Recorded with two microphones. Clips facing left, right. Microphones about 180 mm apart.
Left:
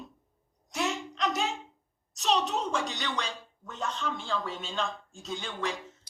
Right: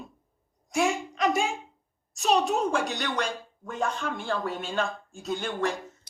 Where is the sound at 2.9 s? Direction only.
50° right (ahead or behind).